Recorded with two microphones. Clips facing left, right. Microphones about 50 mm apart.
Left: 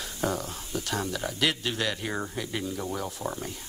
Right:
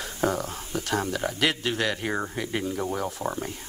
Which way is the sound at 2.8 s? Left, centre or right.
Right.